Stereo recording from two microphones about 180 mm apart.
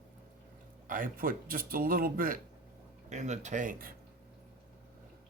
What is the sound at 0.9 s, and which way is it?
Speech, 50° right (ahead or behind).